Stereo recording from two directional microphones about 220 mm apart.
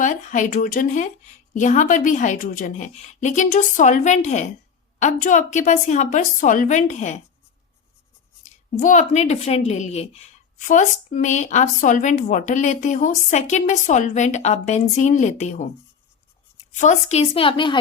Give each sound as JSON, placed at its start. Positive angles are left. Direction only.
{"t": 0.0, "sound": "speech", "side_deg": 35}
{"t": 8.4, "sound": "speech", "side_deg": 35}
{"t": 16.7, "sound": "a woman's voice", "side_deg": 30}